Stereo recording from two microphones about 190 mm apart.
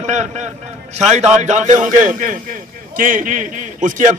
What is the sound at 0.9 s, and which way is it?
A man's voice, 35° right (ahead or behind).